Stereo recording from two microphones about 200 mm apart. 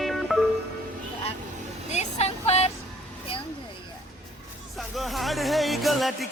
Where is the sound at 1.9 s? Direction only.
35° left (ahead or behind).